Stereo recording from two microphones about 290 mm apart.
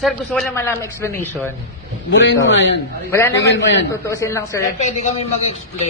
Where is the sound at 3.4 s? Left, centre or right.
Left.